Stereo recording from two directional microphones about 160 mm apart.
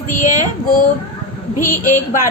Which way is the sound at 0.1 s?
55° left (ahead or behind).